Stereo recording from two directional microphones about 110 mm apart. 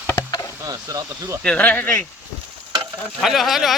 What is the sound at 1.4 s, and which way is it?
Speech, 10° left (ahead or behind).